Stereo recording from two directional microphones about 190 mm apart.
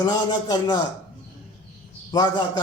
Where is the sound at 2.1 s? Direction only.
20° left (ahead or behind).